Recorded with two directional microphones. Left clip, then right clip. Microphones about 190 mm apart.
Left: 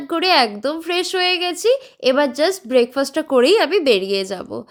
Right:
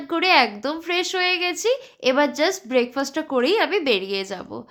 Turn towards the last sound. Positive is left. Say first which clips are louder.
# left 5 dB
turn(degrees=25)  # may be behind; listen again after turning